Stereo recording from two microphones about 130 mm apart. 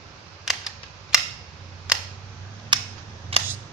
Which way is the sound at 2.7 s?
40° right (ahead or behind).